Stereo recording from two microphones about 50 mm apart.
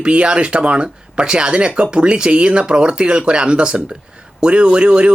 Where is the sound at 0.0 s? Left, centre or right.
Right.